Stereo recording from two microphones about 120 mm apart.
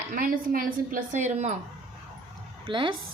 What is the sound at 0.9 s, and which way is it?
Speech, 85° right.